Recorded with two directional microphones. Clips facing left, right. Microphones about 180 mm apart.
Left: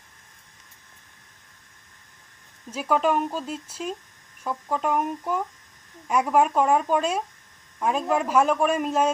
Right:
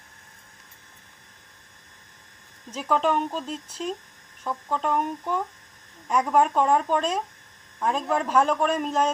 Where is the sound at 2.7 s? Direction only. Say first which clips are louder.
Left 1 dB; 10° left (ahead or behind).